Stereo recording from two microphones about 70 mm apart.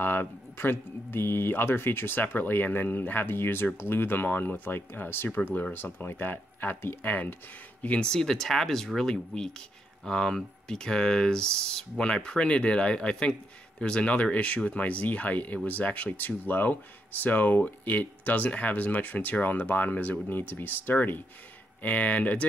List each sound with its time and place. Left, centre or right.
0.0 s speech: left
7.8 s speech: centre